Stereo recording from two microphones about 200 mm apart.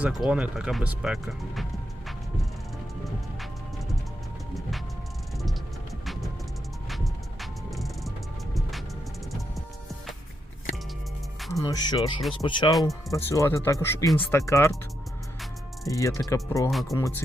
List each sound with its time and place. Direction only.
0.0 s speech: 5° right (ahead or behind)
6.8 s music: centre (ahead or behind)
11.3 s music: centre (ahead or behind)
11.6 s speech: 20° left (ahead or behind)
15.9 s speech: 15° left (ahead or behind)